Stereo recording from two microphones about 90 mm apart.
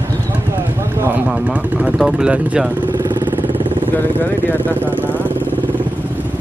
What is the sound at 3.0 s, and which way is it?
Vehicle, 50° right (ahead or behind).